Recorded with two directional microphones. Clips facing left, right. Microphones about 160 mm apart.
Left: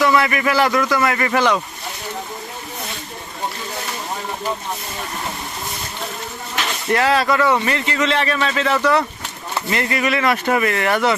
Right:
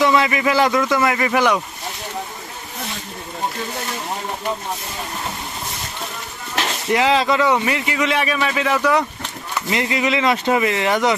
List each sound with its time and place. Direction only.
0.0 s a man's voice: 20° right (ahead or behind)
6.9 s a man's voice: 15° right (ahead or behind)